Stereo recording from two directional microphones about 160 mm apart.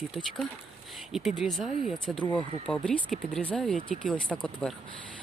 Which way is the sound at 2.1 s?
30° left (ahead or behind).